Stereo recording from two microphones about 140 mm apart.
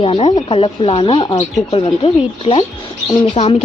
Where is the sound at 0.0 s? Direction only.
45° left (ahead or behind).